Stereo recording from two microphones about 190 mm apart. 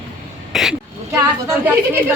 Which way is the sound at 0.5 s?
Centre (ahead or behind).